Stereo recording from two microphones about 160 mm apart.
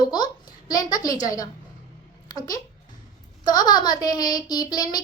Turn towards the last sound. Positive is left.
turn(degrees=25)  # may be behind; listen again after turning